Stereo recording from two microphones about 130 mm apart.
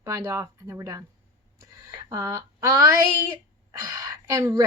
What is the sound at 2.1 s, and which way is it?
Speech, 25° right (ahead or behind).